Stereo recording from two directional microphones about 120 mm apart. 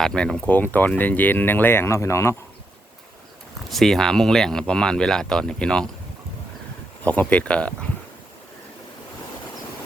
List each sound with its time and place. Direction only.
0.0 s speech: 5° left (ahead or behind)
0.4 s speech: 15° left (ahead or behind)
3.7 s speech: centre (ahead or behind)
7.0 s speech: 10° left (ahead or behind)